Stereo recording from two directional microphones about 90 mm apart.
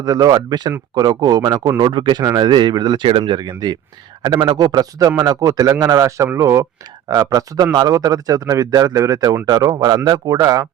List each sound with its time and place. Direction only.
0.0 s speech: 40° right (ahead or behind)
1.8 s speech: 55° right (ahead or behind)